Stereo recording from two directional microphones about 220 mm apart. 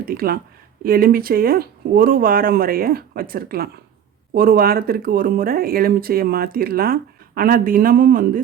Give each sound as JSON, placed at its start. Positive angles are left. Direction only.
{"t": 0.0, "sound": "speech", "side_deg": -45}